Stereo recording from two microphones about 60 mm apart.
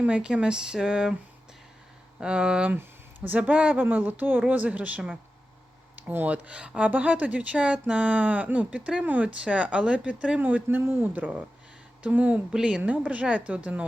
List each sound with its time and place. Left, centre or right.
0.0 s speech: centre
2.2 s speech: centre